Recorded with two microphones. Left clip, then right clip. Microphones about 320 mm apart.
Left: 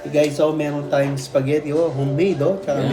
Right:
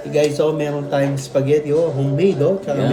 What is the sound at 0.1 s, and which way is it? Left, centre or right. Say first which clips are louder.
Speech: right 1 dB; centre.